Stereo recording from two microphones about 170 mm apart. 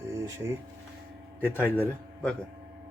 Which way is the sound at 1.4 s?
10° left (ahead or behind).